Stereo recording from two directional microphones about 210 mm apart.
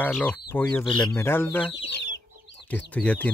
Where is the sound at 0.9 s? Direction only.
20° left (ahead or behind).